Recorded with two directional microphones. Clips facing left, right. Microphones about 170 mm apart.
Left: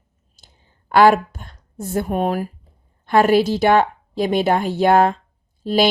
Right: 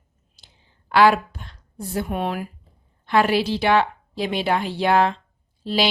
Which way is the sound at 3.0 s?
45° left (ahead or behind).